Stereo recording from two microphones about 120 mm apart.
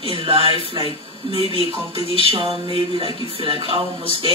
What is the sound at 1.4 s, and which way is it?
Speech, 50° left (ahead or behind).